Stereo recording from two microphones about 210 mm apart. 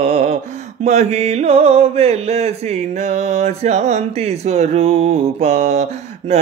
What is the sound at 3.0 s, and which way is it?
Speech, 35° right (ahead or behind).